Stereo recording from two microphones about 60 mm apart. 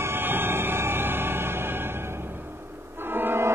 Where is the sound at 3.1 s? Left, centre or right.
Right.